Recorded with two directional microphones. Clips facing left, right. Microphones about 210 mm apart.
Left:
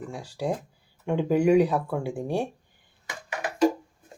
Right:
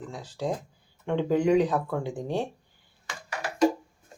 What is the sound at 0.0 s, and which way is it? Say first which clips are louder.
Speech: left 1 dB; 10° left (ahead or behind).